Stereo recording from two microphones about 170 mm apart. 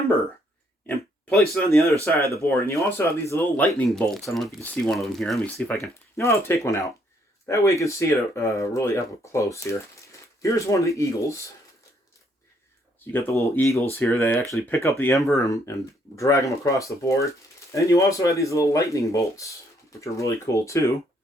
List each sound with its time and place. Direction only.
0.9 s oink: 5° left (ahead or behind)
1.7 s speech: 15° left (ahead or behind)
3.7 s speech: centre (ahead or behind); by 11.3 s 20° left (ahead or behind)
13.6 s speech: 15° left (ahead or behind)